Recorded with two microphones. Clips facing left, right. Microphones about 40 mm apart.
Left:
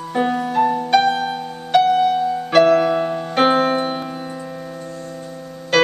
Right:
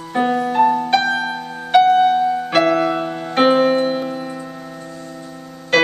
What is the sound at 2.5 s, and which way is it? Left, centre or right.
Music, centre.